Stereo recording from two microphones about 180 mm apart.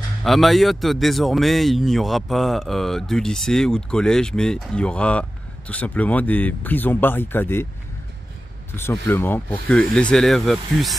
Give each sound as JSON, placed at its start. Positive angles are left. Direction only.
{"t": 0.2, "sound": "speech", "side_deg": 0}
{"t": 8.7, "sound": "speech", "side_deg": 15}